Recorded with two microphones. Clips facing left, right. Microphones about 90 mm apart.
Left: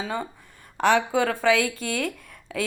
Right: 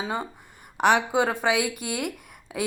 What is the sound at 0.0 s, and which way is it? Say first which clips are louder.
A woman's voice: even; 20° right (ahead or behind).